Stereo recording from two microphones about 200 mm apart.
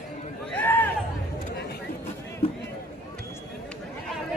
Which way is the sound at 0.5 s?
10° left (ahead or behind).